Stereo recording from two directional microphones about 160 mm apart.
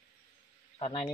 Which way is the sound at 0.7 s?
35° left (ahead or behind).